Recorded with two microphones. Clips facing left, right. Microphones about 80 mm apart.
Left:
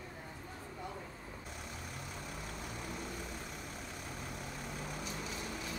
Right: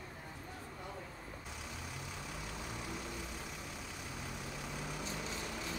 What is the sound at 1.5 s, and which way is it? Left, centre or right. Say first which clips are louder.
Vehicle: even; left.